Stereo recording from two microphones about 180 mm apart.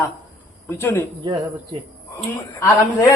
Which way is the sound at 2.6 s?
15° left (ahead or behind).